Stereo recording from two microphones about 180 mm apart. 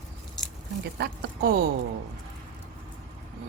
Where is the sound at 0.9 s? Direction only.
65° right (ahead or behind).